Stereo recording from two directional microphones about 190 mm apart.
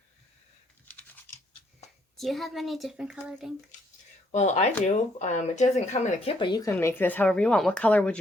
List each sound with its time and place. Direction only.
0.9 s computer keyboard: 10° left (ahead or behind)
2.1 s speech: centre (ahead or behind)
4.3 s speech: 35° left (ahead or behind)
6.4 s speech: 20° left (ahead or behind)